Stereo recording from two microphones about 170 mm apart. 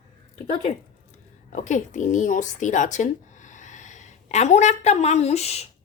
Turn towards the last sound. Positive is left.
turn(degrees=40)  # may be behind; listen again after turning